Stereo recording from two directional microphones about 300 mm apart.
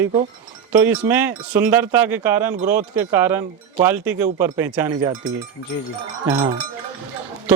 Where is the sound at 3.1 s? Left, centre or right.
Centre.